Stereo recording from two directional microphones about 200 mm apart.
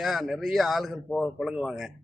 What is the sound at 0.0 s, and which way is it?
A man's voice, centre (ahead or behind).